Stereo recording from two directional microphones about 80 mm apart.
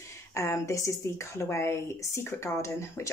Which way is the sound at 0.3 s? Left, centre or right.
Left.